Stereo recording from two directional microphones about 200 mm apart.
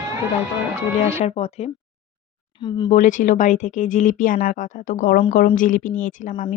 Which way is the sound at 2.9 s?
40° left (ahead or behind).